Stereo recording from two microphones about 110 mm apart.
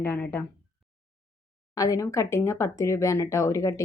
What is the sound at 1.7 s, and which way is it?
Speech, 30° left (ahead or behind).